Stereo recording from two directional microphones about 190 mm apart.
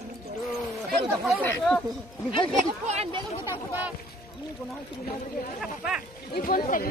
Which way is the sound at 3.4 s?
10° right (ahead or behind).